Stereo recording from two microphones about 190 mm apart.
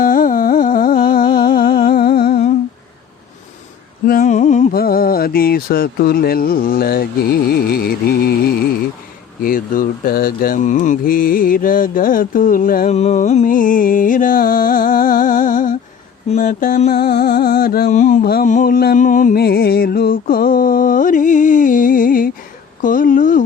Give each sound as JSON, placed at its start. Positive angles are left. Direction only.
{"t": 0.0, "sound": "humming", "side_deg": 45}
{"t": 4.0, "sound": "a sound", "side_deg": 45}
{"t": 7.5, "sound": "music", "side_deg": 55}
{"t": 9.4, "sound": "mantra", "side_deg": 45}
{"t": 16.9, "sound": "music", "side_deg": 55}
{"t": 22.8, "sound": "a sound", "side_deg": 45}